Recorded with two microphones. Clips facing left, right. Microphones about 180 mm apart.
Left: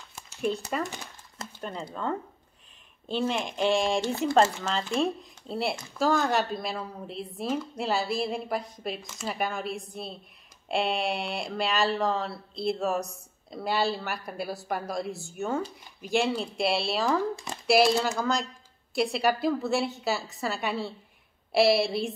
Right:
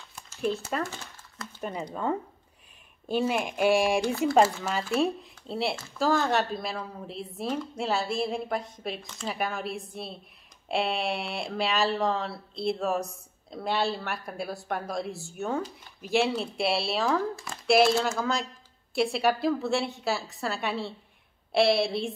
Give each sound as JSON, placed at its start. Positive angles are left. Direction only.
{"t": 0.0, "sound": "a sound", "side_deg": 0}
{"t": 0.8, "sound": "crumpling", "side_deg": 15}
{"t": 1.6, "sound": "speech", "side_deg": -10}
{"t": 3.1, "sound": "speech", "side_deg": -10}